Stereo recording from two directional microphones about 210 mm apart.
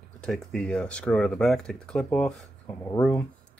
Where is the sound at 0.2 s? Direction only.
5° left (ahead or behind).